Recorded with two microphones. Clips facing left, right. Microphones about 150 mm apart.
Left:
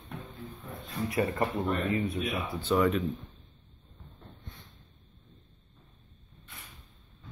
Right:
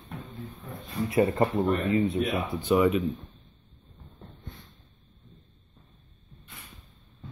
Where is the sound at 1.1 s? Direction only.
20° right (ahead or behind).